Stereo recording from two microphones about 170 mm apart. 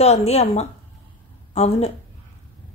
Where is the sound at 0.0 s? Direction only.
40° left (ahead or behind).